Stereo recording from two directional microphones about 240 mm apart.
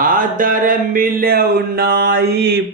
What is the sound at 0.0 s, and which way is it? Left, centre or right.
Mantra, right.